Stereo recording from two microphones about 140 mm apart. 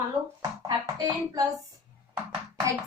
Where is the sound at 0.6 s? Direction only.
25° right (ahead or behind).